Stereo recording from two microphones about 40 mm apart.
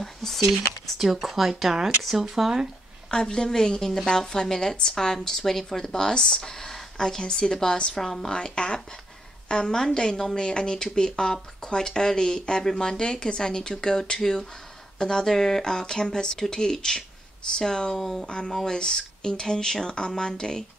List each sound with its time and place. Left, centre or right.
0.0 s a sound: centre
0.9 s speech: centre
3.1 s speech: centre
8.0 s speech: centre
8.3 s speech: left
17.9 s speech: centre
18.7 s speech: centre